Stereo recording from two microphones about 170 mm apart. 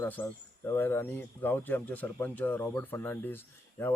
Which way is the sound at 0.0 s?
10° left (ahead or behind).